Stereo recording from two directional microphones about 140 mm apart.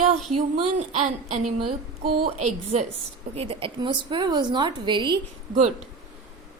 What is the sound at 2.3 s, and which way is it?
Speech, 50° right (ahead or behind).